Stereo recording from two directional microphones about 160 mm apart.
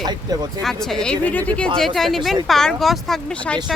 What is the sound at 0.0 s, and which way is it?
Speech, 25° right (ahead or behind).